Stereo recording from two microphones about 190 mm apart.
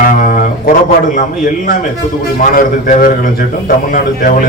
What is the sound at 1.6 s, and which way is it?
A man's voice, 50° left (ahead or behind).